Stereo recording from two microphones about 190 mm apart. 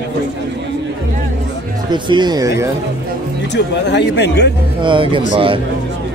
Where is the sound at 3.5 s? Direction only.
65° left (ahead or behind).